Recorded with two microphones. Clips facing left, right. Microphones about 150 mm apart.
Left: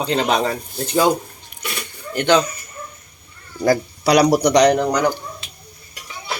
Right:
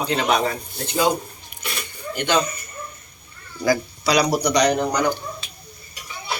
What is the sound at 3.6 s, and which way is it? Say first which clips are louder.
A man's voice: left 4 dB; 60° left (ahead or behind).